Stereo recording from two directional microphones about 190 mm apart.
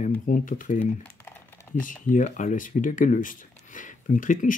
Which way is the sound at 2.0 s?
40° left (ahead or behind).